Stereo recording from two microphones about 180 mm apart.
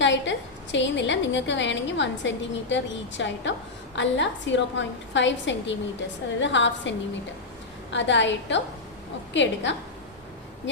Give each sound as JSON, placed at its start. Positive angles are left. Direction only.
{"t": 0.0, "sound": "a woman's voice", "side_deg": 90}